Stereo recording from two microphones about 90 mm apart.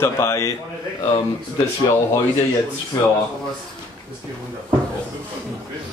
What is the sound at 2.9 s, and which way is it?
Speech, 40° left (ahead or behind).